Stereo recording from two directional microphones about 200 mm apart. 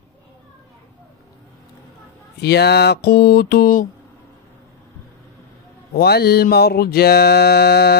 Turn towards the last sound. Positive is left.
turn(degrees=55)  # may be behind; listen again after turning